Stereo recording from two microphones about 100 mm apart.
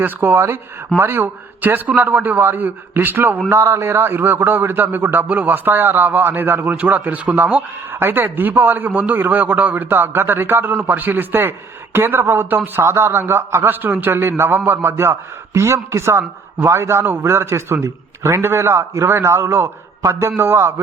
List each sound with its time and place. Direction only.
0.0 s a man's voice: 20° right (ahead or behind)